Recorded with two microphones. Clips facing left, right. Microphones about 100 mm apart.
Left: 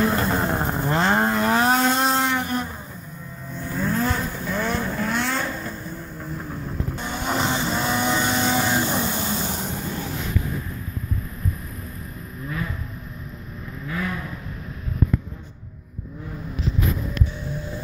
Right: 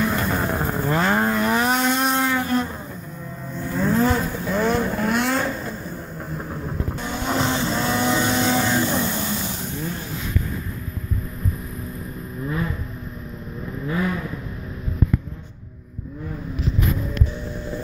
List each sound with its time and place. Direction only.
0.0 s vehicle: 35° left (ahead or behind); by 2.7 s 15° left (ahead or behind)
3.7 s vehicle: centre (ahead or behind)
7.0 s vehicle: centre (ahead or behind)